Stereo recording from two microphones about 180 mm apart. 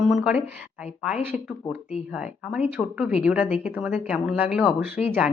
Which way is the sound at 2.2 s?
5° right (ahead or behind).